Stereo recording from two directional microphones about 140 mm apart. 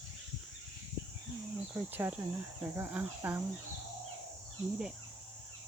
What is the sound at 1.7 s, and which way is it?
Speech, 15° right (ahead or behind).